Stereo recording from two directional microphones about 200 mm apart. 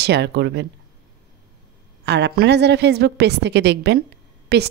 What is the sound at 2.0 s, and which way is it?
Speech, 55° right (ahead or behind).